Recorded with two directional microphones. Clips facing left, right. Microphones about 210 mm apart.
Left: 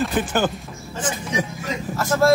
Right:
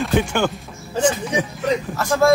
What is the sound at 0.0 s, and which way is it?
Speech, 5° left (ahead or behind).